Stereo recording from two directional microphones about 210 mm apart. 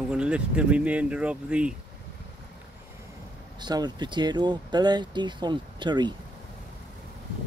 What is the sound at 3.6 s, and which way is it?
Speech, 20° right (ahead or behind).